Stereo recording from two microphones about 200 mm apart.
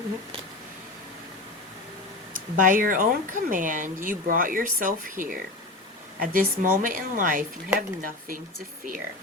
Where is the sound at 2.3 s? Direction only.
40° right (ahead or behind).